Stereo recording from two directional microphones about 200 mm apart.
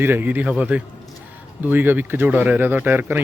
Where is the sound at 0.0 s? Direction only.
10° right (ahead or behind).